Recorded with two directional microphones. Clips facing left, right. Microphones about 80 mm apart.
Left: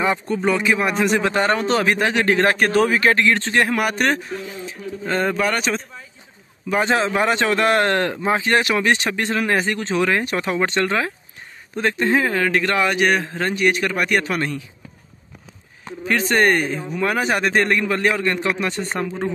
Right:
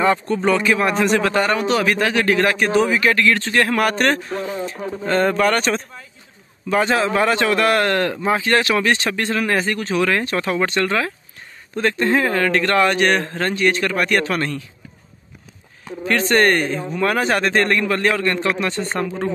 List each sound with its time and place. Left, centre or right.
0.0 s speech: centre
2.5 s speech: left
3.0 s speech: left
4.3 s speech: right
5.0 s speech: centre
6.7 s speech: left
16.1 s speech: centre